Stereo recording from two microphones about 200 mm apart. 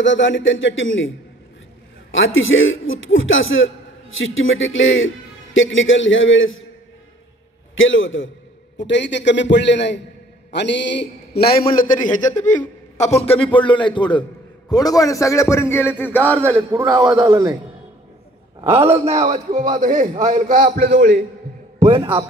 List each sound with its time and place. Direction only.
0.0 s a man's voice: 65° left (ahead or behind)
7.7 s a man's voice: 75° left (ahead or behind); by 16.5 s 5° left (ahead or behind)
16.5 s a man's voice: 15° right (ahead or behind)
18.7 s a man's voice: 30° right (ahead or behind)
21.7 s speech: 25° right (ahead or behind)